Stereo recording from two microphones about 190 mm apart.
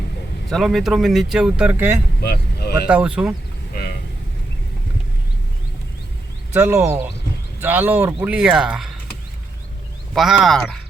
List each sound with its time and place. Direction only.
0.5 s speech: centre (ahead or behind)
2.2 s speech: 55° left (ahead or behind)
2.8 s speech: 5° right (ahead or behind)
6.5 s speech: 15° right (ahead or behind)
10.2 s speech: centre (ahead or behind)